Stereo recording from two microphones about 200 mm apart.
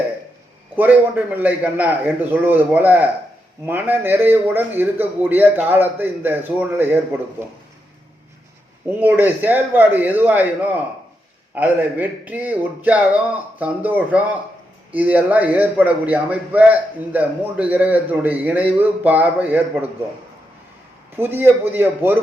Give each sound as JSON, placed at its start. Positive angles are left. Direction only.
{"t": 0.8, "sound": "a man's voice", "side_deg": -10}
{"t": 8.9, "sound": "a man's voice", "side_deg": -10}
{"t": 21.2, "sound": "a man's voice", "side_deg": -10}